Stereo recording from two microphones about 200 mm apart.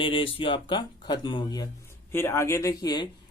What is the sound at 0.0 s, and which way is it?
Speech, 25° left (ahead or behind).